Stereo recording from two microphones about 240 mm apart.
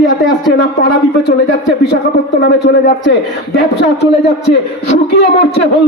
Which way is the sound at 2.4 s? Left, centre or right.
Left.